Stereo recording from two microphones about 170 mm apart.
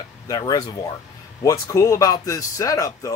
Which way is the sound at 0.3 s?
20° left (ahead or behind).